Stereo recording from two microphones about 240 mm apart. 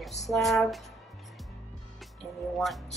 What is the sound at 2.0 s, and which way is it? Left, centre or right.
Music, centre.